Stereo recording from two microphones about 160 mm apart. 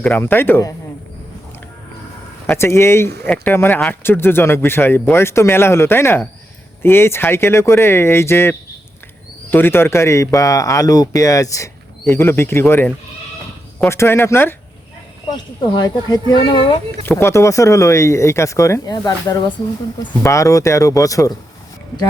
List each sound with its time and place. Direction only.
0.0 s speech: 10° left (ahead or behind)
2.5 s speech: 15° left (ahead or behind)
15.3 s speech: 25° left (ahead or behind)
17.1 s speech: 15° left (ahead or behind)